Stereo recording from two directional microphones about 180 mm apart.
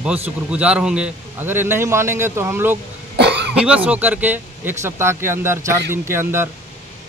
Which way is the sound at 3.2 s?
70° right (ahead or behind).